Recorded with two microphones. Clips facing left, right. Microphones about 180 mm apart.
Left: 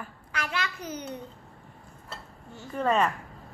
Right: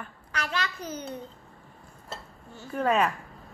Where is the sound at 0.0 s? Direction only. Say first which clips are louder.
Even; 10° left (ahead or behind).